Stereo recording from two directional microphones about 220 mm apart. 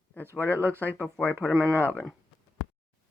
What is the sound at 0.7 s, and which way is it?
Speech, 5° left (ahead or behind).